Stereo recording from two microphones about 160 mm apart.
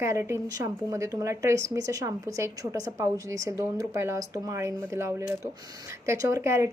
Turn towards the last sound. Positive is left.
turn(degrees=-15)  # may be behind; listen again after turning